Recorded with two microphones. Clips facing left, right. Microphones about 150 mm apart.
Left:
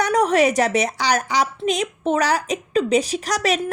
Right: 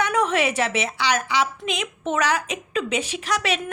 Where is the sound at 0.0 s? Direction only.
40° left (ahead or behind).